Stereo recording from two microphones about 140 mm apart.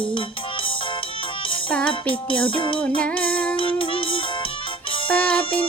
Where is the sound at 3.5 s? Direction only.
40° left (ahead or behind).